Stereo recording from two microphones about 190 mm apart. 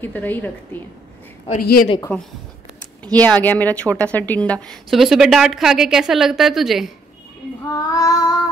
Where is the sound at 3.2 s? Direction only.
10° left (ahead or behind).